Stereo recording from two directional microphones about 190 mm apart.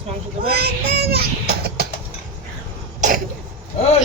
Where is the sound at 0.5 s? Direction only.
55° right (ahead or behind).